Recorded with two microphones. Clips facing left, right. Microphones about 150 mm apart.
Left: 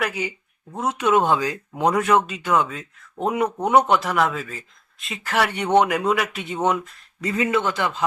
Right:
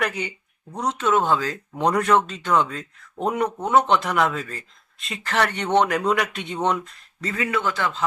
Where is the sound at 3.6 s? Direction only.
15° left (ahead or behind).